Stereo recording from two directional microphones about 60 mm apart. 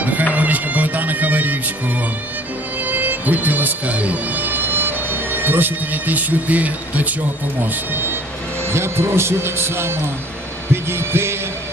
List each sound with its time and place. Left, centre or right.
0.0 s music: right
2.8 s speech: right
7.6 s speech: right